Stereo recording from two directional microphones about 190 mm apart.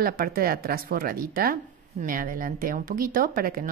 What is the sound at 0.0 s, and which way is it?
Speech, 50° right (ahead or behind).